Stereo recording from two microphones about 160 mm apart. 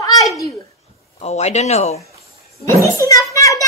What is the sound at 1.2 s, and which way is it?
Speech, 45° left (ahead or behind).